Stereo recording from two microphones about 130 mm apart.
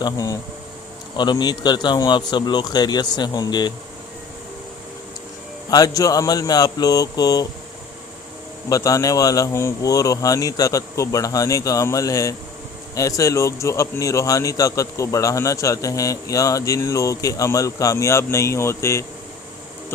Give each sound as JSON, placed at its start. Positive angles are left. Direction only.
{"t": 0.0, "sound": "a man's voice", "side_deg": 30}
{"t": 5.7, "sound": "a man's voice", "side_deg": 30}
{"t": 8.7, "sound": "a man's voice", "side_deg": 25}